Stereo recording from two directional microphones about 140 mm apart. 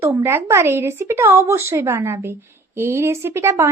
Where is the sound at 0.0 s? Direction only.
15° right (ahead or behind).